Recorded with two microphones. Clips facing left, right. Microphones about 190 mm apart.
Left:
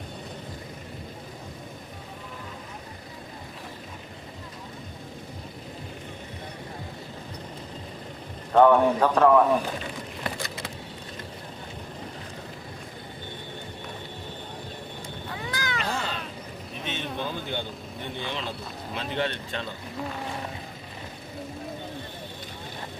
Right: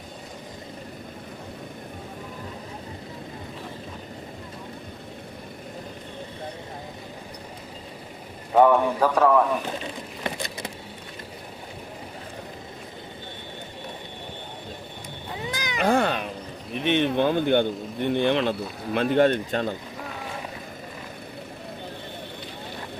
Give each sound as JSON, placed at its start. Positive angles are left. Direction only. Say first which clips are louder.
{"t": 8.5, "sound": "speech", "louder": "even", "side_deg": -5}
{"t": 10.2, "sound": "vehicle", "louder": "right 3 dB", "side_deg": -20}
{"t": 15.3, "sound": "cat", "louder": "right 1 dB", "side_deg": -20}
{"t": 15.8, "sound": "cat", "louder": "right 15 dB", "side_deg": -55}
{"t": 16.7, "sound": "speech", "louder": "right 12 dB", "side_deg": -65}
{"t": 18.9, "sound": "a man's voice", "louder": "right 10 dB", "side_deg": -50}